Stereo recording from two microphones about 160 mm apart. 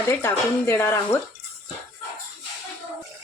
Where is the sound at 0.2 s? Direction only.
15° left (ahead or behind).